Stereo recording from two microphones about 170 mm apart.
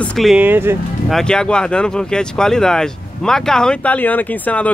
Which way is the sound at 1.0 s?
5° left (ahead or behind).